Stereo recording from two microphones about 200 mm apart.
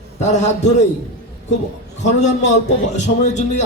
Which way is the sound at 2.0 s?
35° left (ahead or behind).